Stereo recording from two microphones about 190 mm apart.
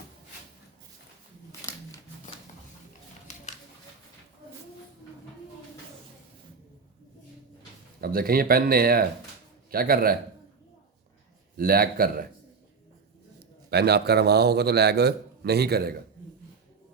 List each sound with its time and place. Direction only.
1.6 s a sound: 15° left (ahead or behind)
8.0 s speech: 50° right (ahead or behind)
11.5 s speech: 50° right (ahead or behind)
13.7 s a man's voice: 60° right (ahead or behind)